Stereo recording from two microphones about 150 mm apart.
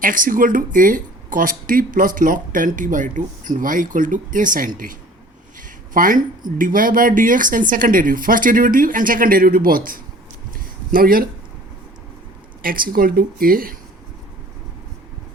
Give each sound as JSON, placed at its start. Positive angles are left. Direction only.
{"t": 0.0, "sound": "speech", "side_deg": -65}
{"t": 5.5, "sound": "a sound", "side_deg": -65}
{"t": 6.6, "sound": "speech", "side_deg": -65}
{"t": 12.6, "sound": "speech", "side_deg": -70}